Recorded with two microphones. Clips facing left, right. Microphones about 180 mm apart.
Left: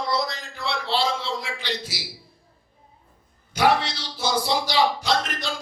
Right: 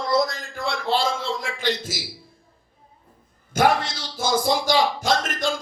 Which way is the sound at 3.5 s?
50° right (ahead or behind).